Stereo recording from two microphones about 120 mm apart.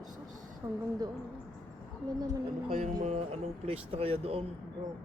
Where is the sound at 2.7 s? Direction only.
60° right (ahead or behind).